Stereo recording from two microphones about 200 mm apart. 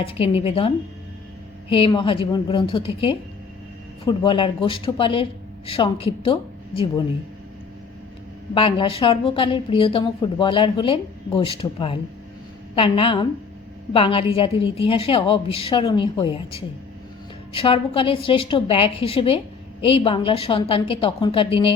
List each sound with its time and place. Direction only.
0.0 s a woman's voice: 30° left (ahead or behind)
1.7 s a woman's voice: 25° left (ahead or behind)
8.5 s a woman's voice: 25° left (ahead or behind)